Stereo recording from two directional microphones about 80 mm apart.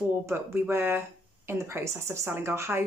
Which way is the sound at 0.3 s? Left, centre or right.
Right.